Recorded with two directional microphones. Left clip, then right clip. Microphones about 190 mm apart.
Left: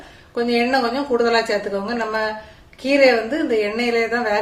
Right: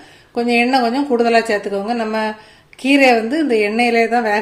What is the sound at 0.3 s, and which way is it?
A woman's voice, 35° right (ahead or behind).